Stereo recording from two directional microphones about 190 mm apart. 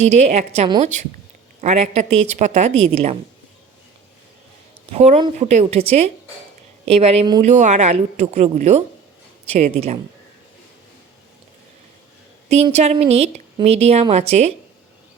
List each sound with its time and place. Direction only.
0.0 s a woman's voice: 35° right (ahead or behind)
4.9 s a woman's voice: 35° right (ahead or behind)
12.5 s a woman's voice: 35° right (ahead or behind)